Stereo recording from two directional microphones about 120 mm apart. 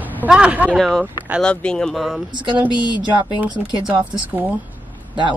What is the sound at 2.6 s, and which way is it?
Speech, 40° left (ahead or behind).